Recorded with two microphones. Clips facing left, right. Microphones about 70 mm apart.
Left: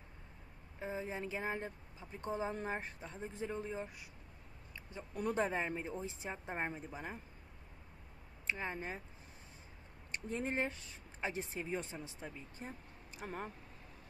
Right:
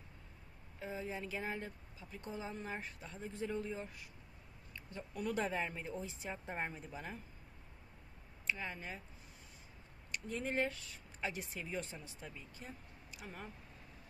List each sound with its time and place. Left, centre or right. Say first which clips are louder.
0.7 s speech: left 2 dB; left
5.1 s speech: left 2 dB; left
8.5 s speech: left 2 dB; left
10.1 s speech: even; left